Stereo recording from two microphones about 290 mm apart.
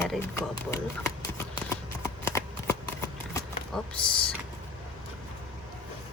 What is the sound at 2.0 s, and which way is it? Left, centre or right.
Shuffling cards, centre.